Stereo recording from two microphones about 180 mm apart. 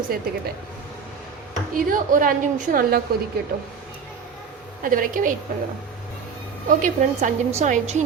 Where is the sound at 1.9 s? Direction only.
50° right (ahead or behind).